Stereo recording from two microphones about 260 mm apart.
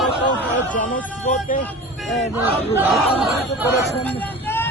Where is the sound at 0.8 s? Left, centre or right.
Left.